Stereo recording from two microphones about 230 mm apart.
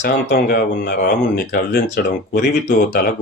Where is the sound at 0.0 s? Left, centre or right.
Left.